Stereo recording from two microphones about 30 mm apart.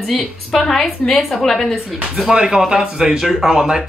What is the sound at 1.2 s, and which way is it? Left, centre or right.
Speech, centre.